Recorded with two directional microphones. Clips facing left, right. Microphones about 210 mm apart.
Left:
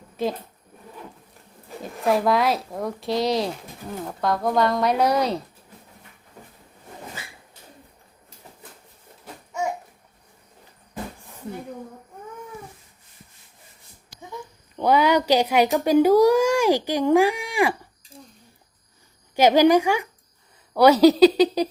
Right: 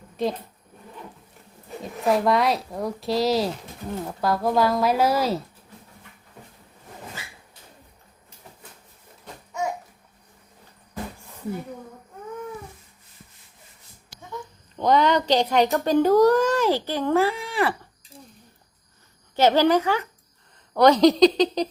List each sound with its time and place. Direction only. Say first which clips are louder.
0.2 s speech: even; centre (ahead or behind)
1.8 s speech: even; centre (ahead or behind)
14.8 s a child's voice: left 1 dB; 10° left (ahead or behind)
19.4 s a child's voice: left 3 dB; 15° left (ahead or behind)